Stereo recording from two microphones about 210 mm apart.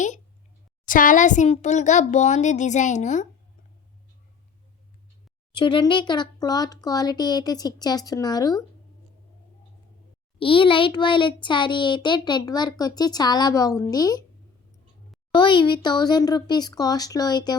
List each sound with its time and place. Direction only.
0.9 s a child's voice: 40° left (ahead or behind)
5.5 s a child's voice: 20° left (ahead or behind)
10.3 s a child's voice: 25° left (ahead or behind)
15.3 s a child's voice: 25° left (ahead or behind)